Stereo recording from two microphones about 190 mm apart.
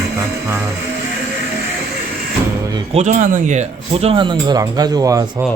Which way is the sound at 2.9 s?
40° right (ahead or behind).